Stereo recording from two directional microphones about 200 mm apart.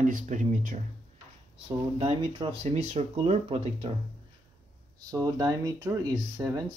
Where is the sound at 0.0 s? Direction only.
40° right (ahead or behind).